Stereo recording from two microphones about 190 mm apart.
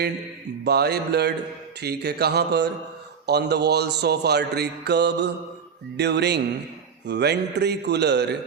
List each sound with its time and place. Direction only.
0.6 s a man's voice: 60° right (ahead or behind)